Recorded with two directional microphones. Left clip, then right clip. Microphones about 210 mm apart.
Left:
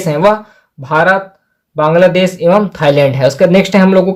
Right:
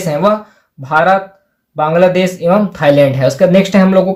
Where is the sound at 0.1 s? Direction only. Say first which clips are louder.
Left 2 dB; 45° left (ahead or behind).